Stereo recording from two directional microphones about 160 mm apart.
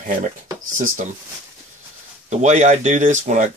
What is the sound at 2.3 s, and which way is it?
Speech, 45° right (ahead or behind).